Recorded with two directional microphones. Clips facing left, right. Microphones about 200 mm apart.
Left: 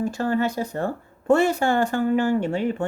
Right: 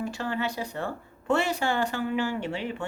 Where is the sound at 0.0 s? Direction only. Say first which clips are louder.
Left 7 dB; 45° left (ahead or behind).